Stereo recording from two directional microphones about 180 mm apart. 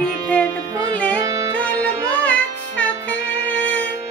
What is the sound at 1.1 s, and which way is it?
Music, 20° right (ahead or behind).